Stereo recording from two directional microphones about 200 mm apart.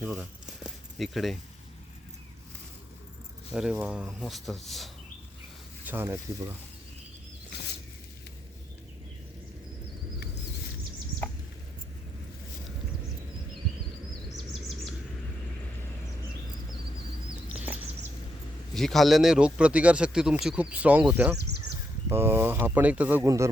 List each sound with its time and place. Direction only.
0.0 s speech: 5° right (ahead or behind)
3.5 s speech: 5° right (ahead or behind)
5.8 s speech: 10° right (ahead or behind)
11.2 s a sound: 10° left (ahead or behind)
17.5 s a sound: 5° right (ahead or behind)
18.7 s speech: centre (ahead or behind); by 23.5 s 15° right (ahead or behind)